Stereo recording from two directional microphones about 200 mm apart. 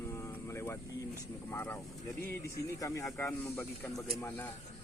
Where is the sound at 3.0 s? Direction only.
10° left (ahead or behind).